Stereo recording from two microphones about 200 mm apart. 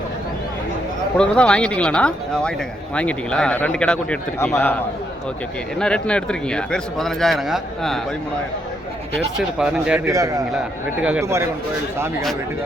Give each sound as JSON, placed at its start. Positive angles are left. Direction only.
{"t": 1.2, "sound": "a man's voice", "side_deg": 5}
{"t": 5.8, "sound": "a man's voice", "side_deg": 5}
{"t": 9.1, "sound": "a man's voice", "side_deg": -5}
{"t": 10.2, "sound": "speech", "side_deg": -15}